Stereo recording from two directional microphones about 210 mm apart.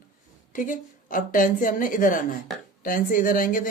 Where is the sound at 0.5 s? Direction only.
40° left (ahead or behind).